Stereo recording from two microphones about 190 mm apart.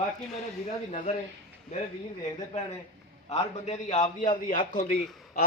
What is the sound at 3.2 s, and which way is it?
A man's voice, 30° left (ahead or behind).